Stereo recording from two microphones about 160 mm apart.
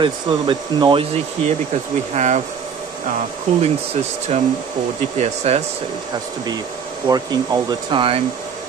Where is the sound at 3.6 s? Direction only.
40° right (ahead or behind).